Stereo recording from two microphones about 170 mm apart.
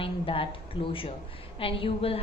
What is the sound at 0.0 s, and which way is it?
A woman's voice, 30° left (ahead or behind).